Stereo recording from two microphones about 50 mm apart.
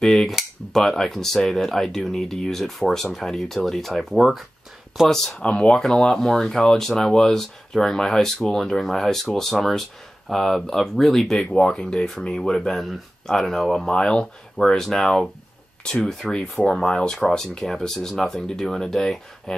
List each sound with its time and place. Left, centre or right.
0.0 s a sound: centre
0.7 s speech: centre
5.0 s speech: centre
5.4 s speech: left; by 11.6 s centre
11.6 s speech: centre
13.8 s speech: centre